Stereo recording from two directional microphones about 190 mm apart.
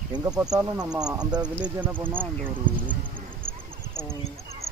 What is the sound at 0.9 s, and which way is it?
Speech, 5° right (ahead or behind).